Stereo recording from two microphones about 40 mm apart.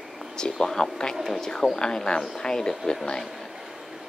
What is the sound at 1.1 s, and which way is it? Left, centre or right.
Speech, centre.